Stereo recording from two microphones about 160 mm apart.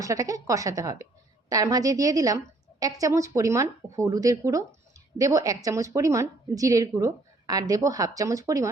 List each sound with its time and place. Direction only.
0.0 s a woman's voice: 20° right (ahead or behind)